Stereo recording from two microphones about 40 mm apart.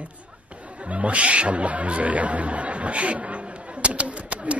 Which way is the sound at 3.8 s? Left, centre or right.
Right.